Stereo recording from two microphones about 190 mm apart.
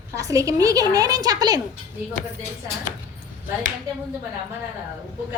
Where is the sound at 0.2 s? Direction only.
15° right (ahead or behind).